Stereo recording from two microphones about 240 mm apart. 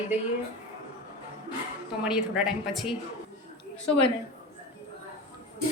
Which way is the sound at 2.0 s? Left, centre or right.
Centre.